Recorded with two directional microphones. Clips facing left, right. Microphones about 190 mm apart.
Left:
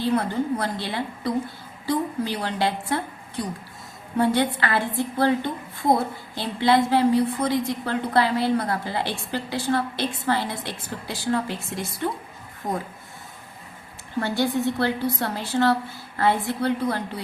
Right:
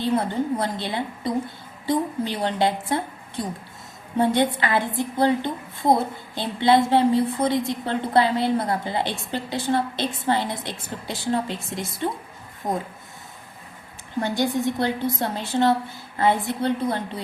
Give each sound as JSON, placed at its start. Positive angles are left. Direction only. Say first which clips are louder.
{"t": 0.0, "sound": "a woman's voice", "louder": "even", "side_deg": -20}
{"t": 14.2, "sound": "a woman's voice", "louder": "even", "side_deg": -15}